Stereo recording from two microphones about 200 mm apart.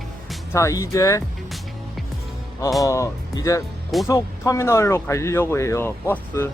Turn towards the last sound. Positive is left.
turn(degrees=10)  # may be behind; listen again after turning